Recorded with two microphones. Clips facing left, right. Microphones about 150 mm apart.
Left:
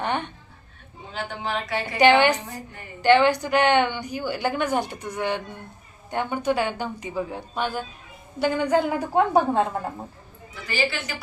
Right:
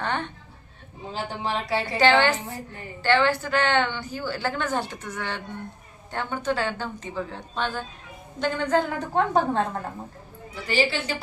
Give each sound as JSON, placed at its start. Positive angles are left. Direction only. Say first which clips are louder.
{"t": 0.0, "sound": "music", "louder": "left 2 dB", "side_deg": 15}
{"t": 1.1, "sound": "a woman's voice", "louder": "even", "side_deg": -35}
{"t": 2.0, "sound": "a woman's voice", "louder": "left 3 dB", "side_deg": 15}
{"t": 10.5, "sound": "a woman's voice", "louder": "right 2 dB", "side_deg": -30}